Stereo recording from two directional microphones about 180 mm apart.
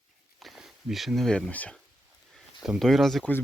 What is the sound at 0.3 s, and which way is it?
Speech, centre (ahead or behind).